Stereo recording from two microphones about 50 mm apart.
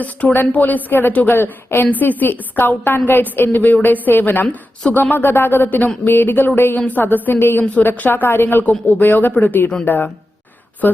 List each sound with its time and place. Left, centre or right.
0.0 s a woman's voice: left
1.9 s a woman's voice: left
4.9 s speech: left
5.1 s speech: left
6.7 s a woman's voice: left
7.0 s speech: left
7.8 s a woman's voice: left
8.1 s a woman's voice: left